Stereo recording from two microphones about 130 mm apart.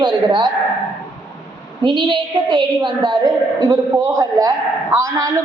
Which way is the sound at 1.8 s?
35° right (ahead or behind).